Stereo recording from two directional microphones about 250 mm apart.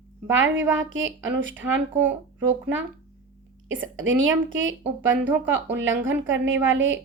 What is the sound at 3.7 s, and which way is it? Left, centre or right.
A woman's voice, right.